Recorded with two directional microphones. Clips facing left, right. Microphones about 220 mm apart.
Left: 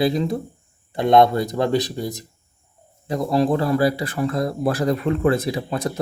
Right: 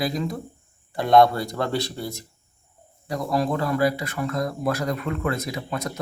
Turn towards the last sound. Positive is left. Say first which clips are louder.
# left 5 dB
turn(degrees=30)  # may be behind; listen again after turning